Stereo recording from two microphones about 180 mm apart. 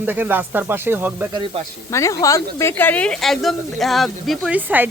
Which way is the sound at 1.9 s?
15° left (ahead or behind).